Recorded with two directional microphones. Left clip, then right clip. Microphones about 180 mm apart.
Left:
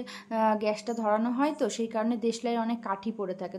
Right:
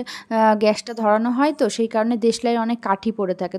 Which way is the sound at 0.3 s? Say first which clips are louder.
Right 10 dB; 45° right (ahead or behind).